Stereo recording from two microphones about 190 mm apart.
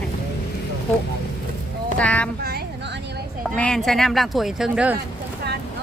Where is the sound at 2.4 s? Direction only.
55° right (ahead or behind).